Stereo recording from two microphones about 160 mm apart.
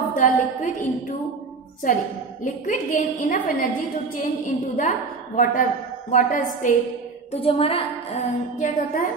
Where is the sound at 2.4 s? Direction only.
55° left (ahead or behind).